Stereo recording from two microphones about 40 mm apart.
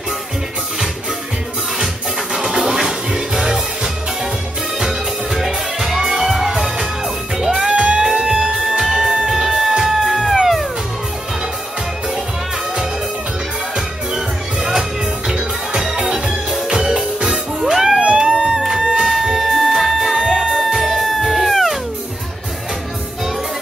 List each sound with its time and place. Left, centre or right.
2.3 s music: centre
7.7 s music: right
8.7 s music: centre
13.7 s music: centre
17.9 s music: right
19.0 s music: centre